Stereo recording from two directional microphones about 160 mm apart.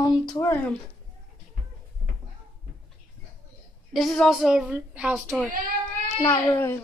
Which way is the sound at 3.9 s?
Centre (ahead or behind).